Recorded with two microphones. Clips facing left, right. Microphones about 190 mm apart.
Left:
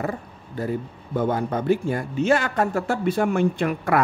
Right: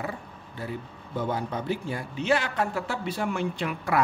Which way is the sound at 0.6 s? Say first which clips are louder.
Left 8 dB; 50° left (ahead or behind).